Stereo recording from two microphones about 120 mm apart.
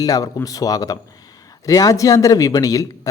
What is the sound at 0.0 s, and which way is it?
A man's voice, 30° left (ahead or behind).